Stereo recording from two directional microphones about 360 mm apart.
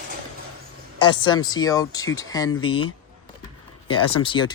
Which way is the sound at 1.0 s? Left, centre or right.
Centre.